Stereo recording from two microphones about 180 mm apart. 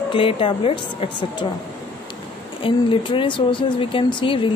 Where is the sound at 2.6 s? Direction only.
30° left (ahead or behind).